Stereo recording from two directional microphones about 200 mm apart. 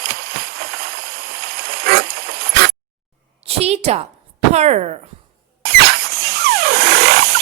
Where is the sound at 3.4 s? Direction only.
30° right (ahead or behind).